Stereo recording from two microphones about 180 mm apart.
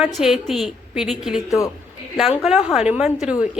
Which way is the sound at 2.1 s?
Centre (ahead or behind).